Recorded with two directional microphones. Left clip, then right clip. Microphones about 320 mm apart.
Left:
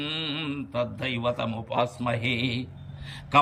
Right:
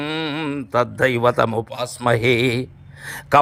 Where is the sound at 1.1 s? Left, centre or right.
Right.